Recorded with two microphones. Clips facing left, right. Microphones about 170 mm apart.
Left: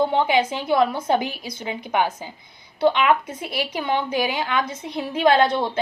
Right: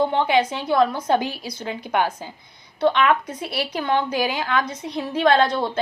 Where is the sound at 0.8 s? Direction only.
25° left (ahead or behind).